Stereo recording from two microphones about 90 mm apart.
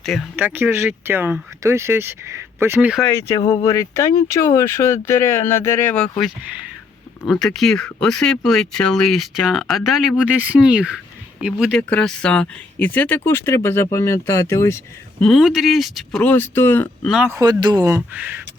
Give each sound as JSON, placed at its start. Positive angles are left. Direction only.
{"t": 0.0, "sound": "speech", "side_deg": 0}
{"t": 0.3, "sound": "speech", "side_deg": -20}
{"t": 3.1, "sound": "speech", "side_deg": 35}
{"t": 5.9, "sound": "speech", "side_deg": 10}
{"t": 7.3, "sound": "speech", "side_deg": 0}
{"t": 10.2, "sound": "speech", "side_deg": -15}
{"t": 11.8, "sound": "speech", "side_deg": 15}
{"t": 15.4, "sound": "speech", "side_deg": -5}
{"t": 16.2, "sound": "speech", "side_deg": 20}
{"t": 17.4, "sound": "speech", "side_deg": -50}
{"t": 18.1, "sound": "speech", "side_deg": -20}